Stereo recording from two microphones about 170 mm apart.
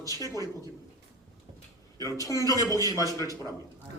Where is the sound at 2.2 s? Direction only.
20° left (ahead or behind).